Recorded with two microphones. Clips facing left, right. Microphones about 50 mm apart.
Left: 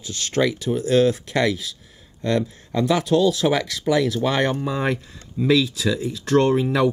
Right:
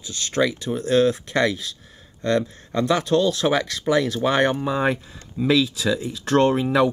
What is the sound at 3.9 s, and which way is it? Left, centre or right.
Speech, centre.